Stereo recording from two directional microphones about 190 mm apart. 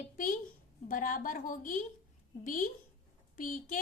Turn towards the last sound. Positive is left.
turn(degrees=45)  # may be behind; listen again after turning